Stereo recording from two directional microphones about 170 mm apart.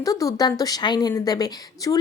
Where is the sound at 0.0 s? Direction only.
20° left (ahead or behind).